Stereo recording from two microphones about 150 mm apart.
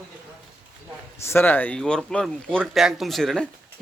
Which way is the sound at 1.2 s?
15° left (ahead or behind).